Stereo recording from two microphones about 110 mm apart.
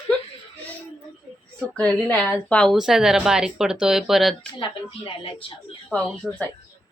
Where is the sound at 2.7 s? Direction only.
5° right (ahead or behind).